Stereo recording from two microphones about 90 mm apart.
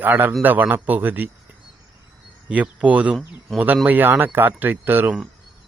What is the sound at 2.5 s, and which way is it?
Speech, 15° right (ahead or behind).